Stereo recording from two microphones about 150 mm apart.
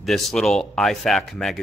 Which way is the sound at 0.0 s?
Centre (ahead or behind).